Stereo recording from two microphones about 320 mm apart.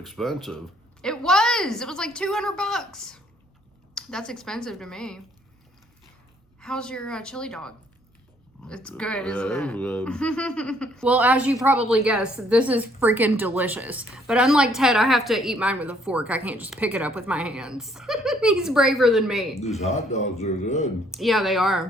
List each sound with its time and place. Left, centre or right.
0.0 s a woman's voice: centre
6.6 s a woman's voice: centre
19.8 s a man's voice: left
21.1 s a woman's voice: centre